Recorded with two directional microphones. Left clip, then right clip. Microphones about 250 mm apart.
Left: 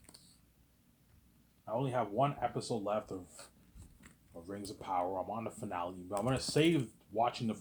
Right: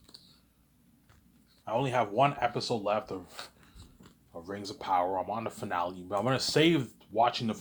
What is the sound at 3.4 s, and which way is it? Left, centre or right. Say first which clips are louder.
Speech: right 11 dB; right.